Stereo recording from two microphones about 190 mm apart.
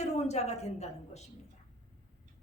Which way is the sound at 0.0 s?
35° left (ahead or behind).